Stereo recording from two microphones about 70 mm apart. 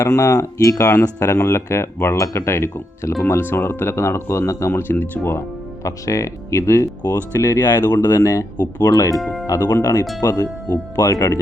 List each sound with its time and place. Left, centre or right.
0.0 s speech: left
4.7 s speech: left
5.8 s speech: left
7.0 s speech: left
8.5 s speech: left
9.2 s speech: centre
9.5 s speech: left